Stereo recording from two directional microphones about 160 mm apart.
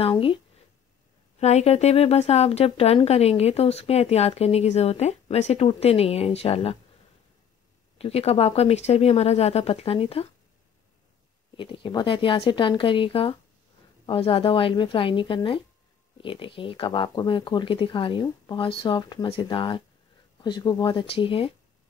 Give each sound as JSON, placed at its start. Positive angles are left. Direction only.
{"t": 0.0, "sound": "a sound", "side_deg": 35}
{"t": 1.4, "sound": "speech", "side_deg": 45}
{"t": 8.0, "sound": "speech", "side_deg": 40}
{"t": 11.5, "sound": "speech", "side_deg": 30}